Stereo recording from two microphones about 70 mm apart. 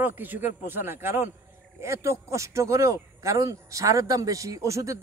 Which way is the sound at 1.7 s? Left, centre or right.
Right.